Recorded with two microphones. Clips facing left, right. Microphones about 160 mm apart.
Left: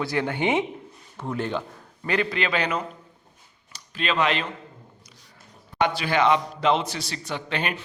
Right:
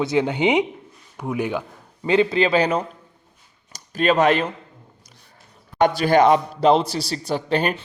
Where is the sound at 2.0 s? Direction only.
25° right (ahead or behind); by 4.5 s 45° right (ahead or behind).